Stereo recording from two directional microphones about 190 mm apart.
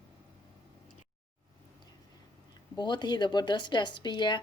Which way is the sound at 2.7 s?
25° left (ahead or behind).